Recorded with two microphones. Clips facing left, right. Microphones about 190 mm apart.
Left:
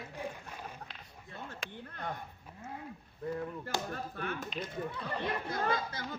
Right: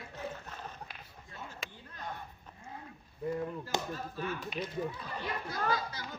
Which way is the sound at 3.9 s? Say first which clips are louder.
Right 1 dB; 60° left (ahead or behind).